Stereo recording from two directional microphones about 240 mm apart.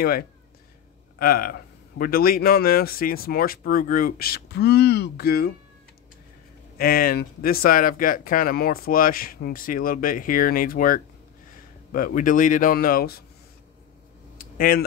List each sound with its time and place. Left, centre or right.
1.2 s a man's voice: left
6.8 s a man's voice: left
14.4 s a sound: left